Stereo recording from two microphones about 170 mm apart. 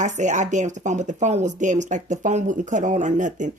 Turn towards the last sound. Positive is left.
turn(degrees=-45)  # may be behind; listen again after turning